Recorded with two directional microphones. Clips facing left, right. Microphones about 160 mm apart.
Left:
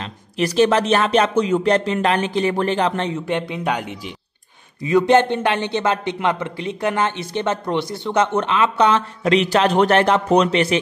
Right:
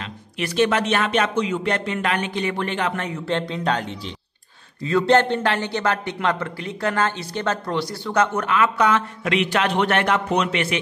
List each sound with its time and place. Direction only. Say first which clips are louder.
0.4 s speech: left 4 dB; 35° left (ahead or behind)
3.3 s a man's voice: left 1 dB; 15° left (ahead or behind); by 10.8 s 35° left (ahead or behind)